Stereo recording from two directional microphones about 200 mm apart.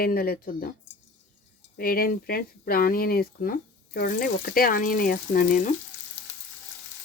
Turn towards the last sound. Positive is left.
turn(degrees=40)  # may be behind; listen again after turning